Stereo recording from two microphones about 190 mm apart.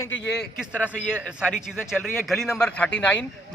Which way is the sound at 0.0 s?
10° left (ahead or behind).